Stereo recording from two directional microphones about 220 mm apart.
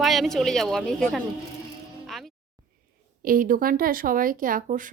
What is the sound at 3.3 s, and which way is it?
Speech, 40° right (ahead or behind).